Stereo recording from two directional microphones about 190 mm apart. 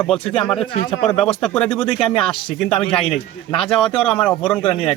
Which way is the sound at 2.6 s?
5° left (ahead or behind).